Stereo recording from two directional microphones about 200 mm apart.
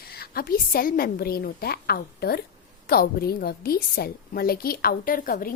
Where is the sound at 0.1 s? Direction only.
50° left (ahead or behind).